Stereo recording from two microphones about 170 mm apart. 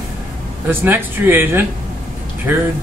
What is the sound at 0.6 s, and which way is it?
Speech, 10° right (ahead or behind).